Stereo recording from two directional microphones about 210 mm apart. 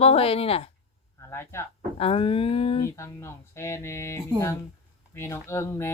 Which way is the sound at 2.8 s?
15° left (ahead or behind).